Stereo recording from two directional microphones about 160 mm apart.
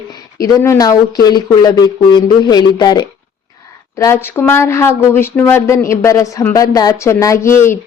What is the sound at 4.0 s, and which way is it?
Speech, 15° left (ahead or behind).